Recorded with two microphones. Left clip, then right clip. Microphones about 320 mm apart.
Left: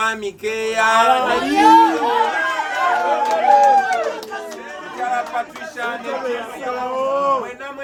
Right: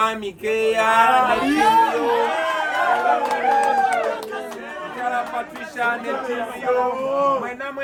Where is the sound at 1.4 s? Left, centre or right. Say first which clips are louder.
Left 3 dB; left.